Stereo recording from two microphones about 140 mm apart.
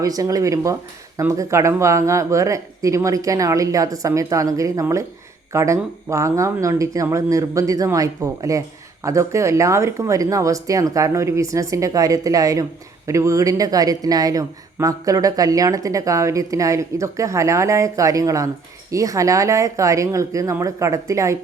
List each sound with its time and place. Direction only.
0.0 s speech: 25° right (ahead or behind)